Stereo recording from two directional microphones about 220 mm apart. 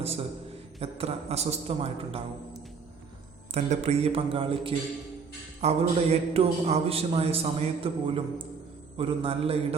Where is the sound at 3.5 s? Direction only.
30° right (ahead or behind).